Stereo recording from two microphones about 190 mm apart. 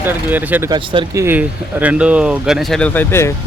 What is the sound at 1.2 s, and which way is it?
Speech, 10° right (ahead or behind).